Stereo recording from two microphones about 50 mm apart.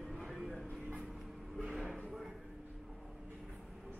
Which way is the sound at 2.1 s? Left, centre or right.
Centre.